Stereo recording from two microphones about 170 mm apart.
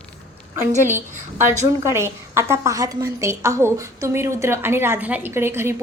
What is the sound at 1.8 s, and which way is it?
A woman's voice, 15° right (ahead or behind).